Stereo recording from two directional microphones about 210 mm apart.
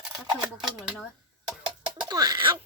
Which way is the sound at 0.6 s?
Centre (ahead or behind).